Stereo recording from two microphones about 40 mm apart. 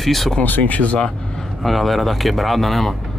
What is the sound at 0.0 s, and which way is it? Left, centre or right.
Speech, centre.